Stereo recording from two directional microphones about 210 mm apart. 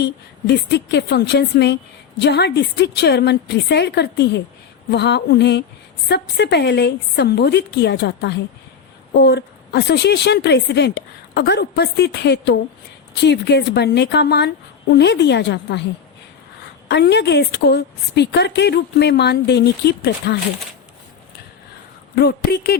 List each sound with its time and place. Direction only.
0.0 s a woman's voice: 55° left (ahead or behind)
16.9 s a woman's voice: 50° left (ahead or behind)
22.1 s a woman's voice: 50° left (ahead or behind)